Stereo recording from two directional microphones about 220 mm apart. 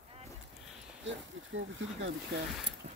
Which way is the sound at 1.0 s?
60° right (ahead or behind).